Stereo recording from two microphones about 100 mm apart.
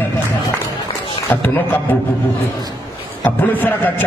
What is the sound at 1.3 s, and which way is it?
Speech, 20° left (ahead or behind).